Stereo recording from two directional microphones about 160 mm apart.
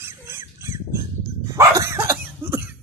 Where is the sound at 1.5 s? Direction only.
20° right (ahead or behind).